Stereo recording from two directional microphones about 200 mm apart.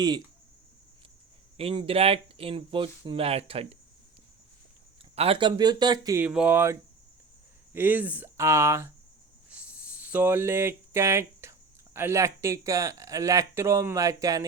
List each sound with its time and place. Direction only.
1.5 s speech: 30° right (ahead or behind)
5.1 s speech: 30° right (ahead or behind)
6.2 s speech: 5° right (ahead or behind)
9.5 s a sound: 5° right (ahead or behind)
11.9 s speech: 15° right (ahead or behind)